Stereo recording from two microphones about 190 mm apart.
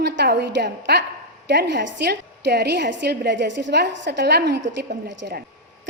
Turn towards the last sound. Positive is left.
turn(degrees=-65)  # may be behind; listen again after turning